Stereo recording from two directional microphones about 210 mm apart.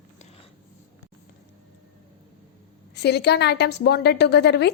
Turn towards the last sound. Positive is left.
turn(degrees=50)  # may be behind; listen again after turning